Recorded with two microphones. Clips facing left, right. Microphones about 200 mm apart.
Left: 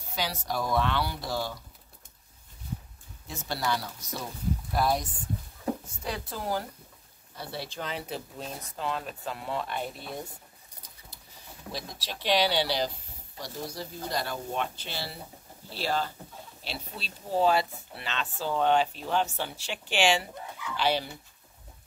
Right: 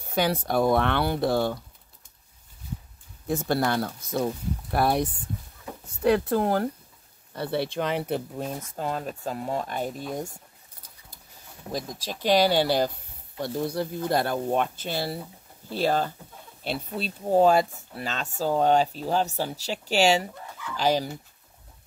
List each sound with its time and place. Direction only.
0.1 s speech: 55° right (ahead or behind)
3.3 s speech: 55° right (ahead or behind)
11.7 s speech: 45° right (ahead or behind)